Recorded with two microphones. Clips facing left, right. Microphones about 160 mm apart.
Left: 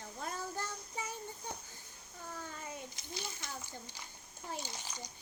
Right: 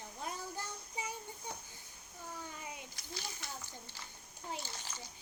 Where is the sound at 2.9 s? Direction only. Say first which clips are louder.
Left 2 dB; 20° left (ahead or behind).